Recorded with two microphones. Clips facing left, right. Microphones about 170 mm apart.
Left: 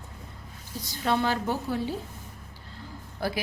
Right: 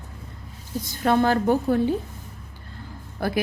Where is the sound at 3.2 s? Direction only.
55° right (ahead or behind).